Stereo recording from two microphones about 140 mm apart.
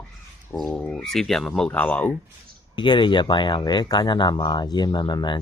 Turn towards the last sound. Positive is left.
turn(degrees=30)  # may be behind; listen again after turning